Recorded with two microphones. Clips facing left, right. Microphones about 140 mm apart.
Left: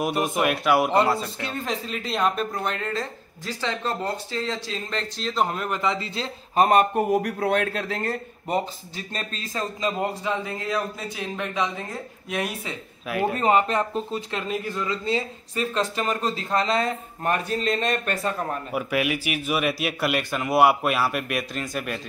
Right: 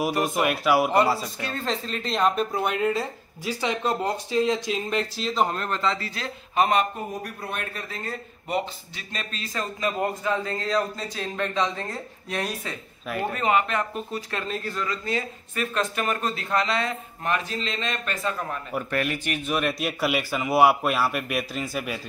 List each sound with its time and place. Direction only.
0.0 s speech: centre (ahead or behind)
1.4 s speech: 15° left (ahead or behind)
6.5 s a man's voice: 45° left (ahead or behind)
7.0 s speech: 65° left (ahead or behind)
8.5 s speech: 40° left (ahead or behind)
9.5 s a man's voice: 20° left (ahead or behind)
13.3 s speech: 35° left (ahead or behind)
16.6 s a man's voice: 40° left (ahead or behind)
18.7 s speech: 10° left (ahead or behind)